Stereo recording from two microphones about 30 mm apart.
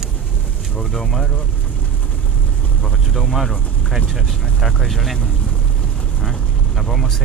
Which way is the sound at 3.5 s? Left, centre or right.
Right.